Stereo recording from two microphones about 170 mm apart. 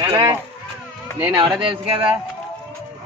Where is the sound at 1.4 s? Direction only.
30° right (ahead or behind).